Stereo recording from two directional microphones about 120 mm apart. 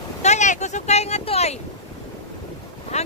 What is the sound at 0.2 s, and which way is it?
Vehicle, 75° left (ahead or behind).